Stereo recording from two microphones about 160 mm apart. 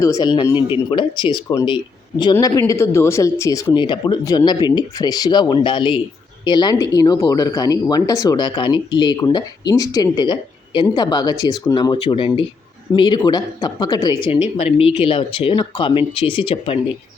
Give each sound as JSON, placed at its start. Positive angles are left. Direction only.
{"t": 0.0, "sound": "speech", "side_deg": 25}
{"t": 2.3, "sound": "speech", "side_deg": 20}